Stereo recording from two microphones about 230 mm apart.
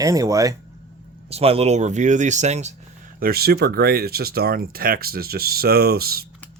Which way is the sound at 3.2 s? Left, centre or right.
Right.